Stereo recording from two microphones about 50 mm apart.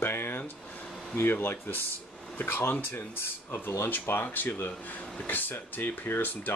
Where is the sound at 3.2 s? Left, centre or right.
Left.